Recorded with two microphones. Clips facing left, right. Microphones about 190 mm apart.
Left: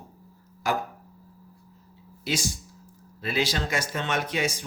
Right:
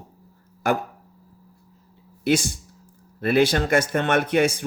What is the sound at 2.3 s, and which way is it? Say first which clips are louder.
Speech: right 9 dB; 60° right (ahead or behind).